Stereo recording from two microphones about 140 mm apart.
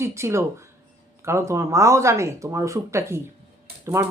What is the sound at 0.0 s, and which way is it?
Speech, 20° right (ahead or behind).